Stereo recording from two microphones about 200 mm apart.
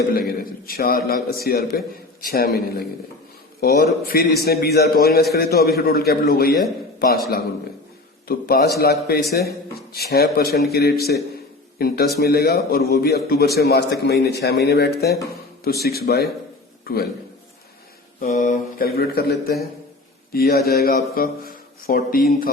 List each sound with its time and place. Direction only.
0.1 s a man's voice: 50° left (ahead or behind)
18.2 s a man's voice: 35° left (ahead or behind)